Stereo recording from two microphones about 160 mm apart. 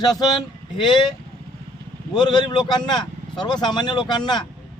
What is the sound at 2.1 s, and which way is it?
A man's voice, 30° left (ahead or behind).